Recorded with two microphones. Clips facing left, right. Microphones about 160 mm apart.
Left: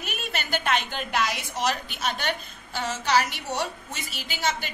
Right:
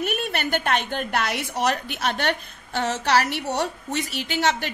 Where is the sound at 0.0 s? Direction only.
65° right (ahead or behind).